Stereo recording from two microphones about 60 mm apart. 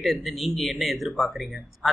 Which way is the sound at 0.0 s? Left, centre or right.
Centre.